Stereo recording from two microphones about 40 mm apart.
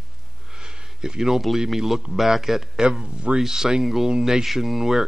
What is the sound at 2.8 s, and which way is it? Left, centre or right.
Speech, right.